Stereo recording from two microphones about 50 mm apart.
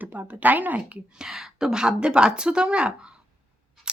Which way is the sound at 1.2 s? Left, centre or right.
Centre.